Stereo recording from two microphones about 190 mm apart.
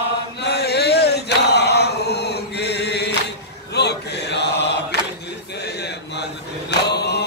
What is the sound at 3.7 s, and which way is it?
Mantra, 60° left (ahead or behind).